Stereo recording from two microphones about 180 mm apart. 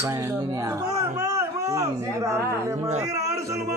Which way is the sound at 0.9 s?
20° right (ahead or behind).